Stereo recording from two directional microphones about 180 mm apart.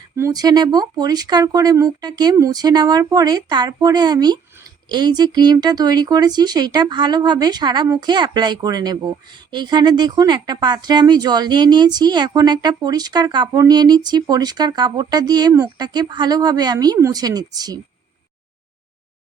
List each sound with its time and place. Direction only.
0.2 s speech: 20° right (ahead or behind)